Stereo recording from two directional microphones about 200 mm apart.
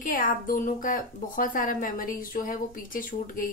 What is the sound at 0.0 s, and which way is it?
A woman's voice, 45° left (ahead or behind).